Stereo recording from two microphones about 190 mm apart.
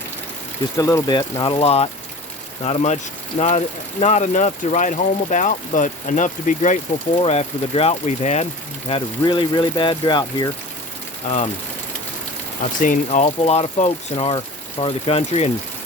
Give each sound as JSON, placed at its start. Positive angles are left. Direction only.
{"t": 0.8, "sound": "speech", "side_deg": 20}
{"t": 8.9, "sound": "speech", "side_deg": 25}
{"t": 11.3, "sound": "speech", "side_deg": 40}
{"t": 12.8, "sound": "speech", "side_deg": 45}